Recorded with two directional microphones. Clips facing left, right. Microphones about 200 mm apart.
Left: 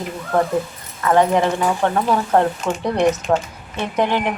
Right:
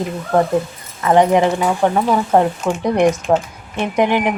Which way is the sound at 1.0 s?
20° right (ahead or behind).